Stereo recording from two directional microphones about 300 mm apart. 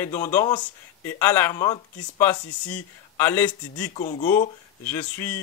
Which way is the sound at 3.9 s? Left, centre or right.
Left.